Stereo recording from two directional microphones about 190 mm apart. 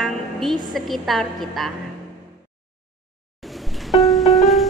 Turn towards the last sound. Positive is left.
turn(degrees=0)  # may be behind; listen again after turning